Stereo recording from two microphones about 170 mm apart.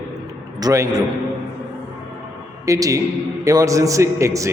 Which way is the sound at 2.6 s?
20° right (ahead or behind).